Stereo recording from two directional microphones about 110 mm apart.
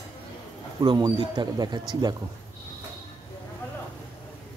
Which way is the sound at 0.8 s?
40° right (ahead or behind).